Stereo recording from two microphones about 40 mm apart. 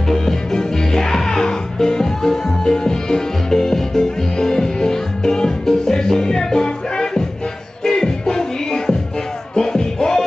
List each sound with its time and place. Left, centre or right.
0.1 s music: centre